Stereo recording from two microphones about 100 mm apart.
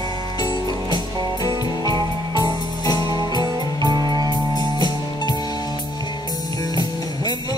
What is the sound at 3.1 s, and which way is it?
Music, 45° right (ahead or behind).